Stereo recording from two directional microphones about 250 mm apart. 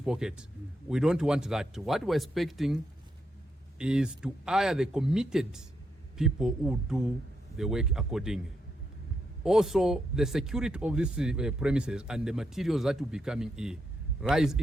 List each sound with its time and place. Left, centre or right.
0.0 s speech: centre
3.8 s speech: centre
9.4 s speech: centre